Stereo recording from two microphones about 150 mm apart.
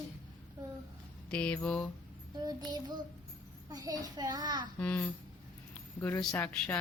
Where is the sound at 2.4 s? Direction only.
25° right (ahead or behind).